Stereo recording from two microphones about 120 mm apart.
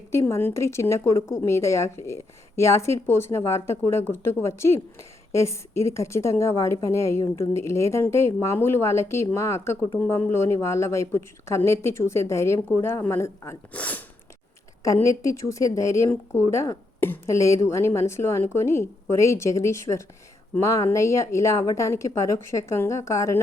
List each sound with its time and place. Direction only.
0.1 s speech: 20° left (ahead or behind)
13.7 s speech: 10° left (ahead or behind)
15.2 s speech: 25° left (ahead or behind)